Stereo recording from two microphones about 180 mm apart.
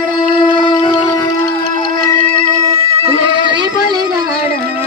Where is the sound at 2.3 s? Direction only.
40° right (ahead or behind); by 4.0 s 25° right (ahead or behind).